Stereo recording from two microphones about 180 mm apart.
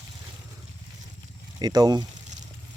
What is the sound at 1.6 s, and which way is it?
Speech, 20° right (ahead or behind).